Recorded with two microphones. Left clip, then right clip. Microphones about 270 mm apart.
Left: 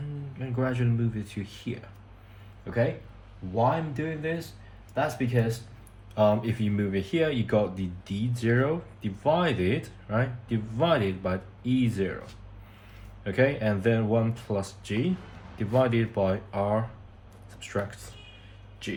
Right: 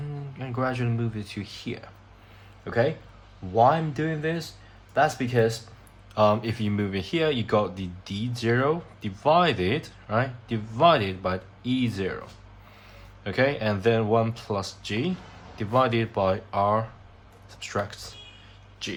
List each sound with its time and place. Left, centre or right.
0.3 s speech: centre
3.5 s speech: right
6.1 s speech: centre
13.2 s speech: centre